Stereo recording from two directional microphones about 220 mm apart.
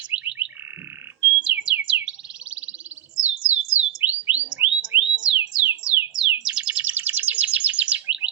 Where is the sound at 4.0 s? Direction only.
10° right (ahead or behind).